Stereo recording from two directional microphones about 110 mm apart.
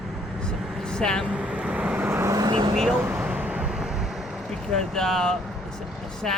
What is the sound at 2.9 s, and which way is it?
Vehicle, 15° right (ahead or behind).